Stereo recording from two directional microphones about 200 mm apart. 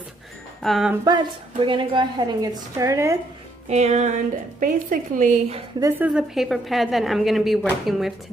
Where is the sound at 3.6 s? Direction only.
35° right (ahead or behind).